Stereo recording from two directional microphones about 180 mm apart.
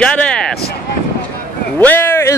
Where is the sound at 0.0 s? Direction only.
5° left (ahead or behind).